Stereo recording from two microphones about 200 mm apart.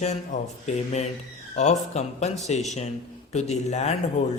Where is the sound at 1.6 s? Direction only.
35° left (ahead or behind).